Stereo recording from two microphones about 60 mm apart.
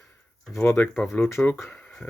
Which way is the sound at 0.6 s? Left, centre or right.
Left.